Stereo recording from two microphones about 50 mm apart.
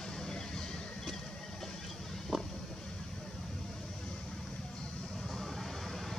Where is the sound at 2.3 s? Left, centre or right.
Centre.